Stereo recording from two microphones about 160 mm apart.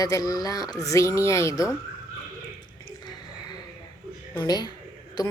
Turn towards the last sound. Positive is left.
turn(degrees=25)  # may be behind; listen again after turning